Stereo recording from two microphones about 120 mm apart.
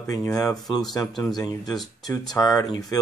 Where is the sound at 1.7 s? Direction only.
Centre (ahead or behind).